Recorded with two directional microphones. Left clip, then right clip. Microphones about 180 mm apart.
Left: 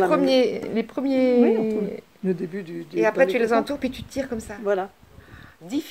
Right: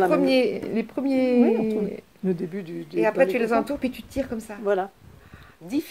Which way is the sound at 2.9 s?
25° left (ahead or behind).